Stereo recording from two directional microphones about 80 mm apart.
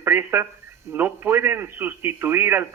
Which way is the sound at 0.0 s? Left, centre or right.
Right.